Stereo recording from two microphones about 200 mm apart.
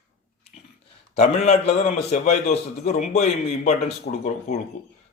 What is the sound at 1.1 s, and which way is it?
A man's voice, 35° left (ahead or behind).